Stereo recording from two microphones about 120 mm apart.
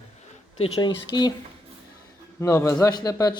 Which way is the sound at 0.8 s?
40° left (ahead or behind).